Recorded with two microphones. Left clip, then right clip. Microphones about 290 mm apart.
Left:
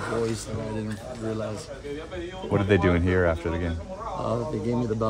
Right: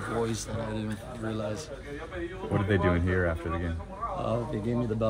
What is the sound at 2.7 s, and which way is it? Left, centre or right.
Speech, left.